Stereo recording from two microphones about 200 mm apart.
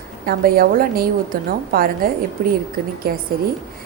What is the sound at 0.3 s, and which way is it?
A woman's voice, 50° right (ahead or behind).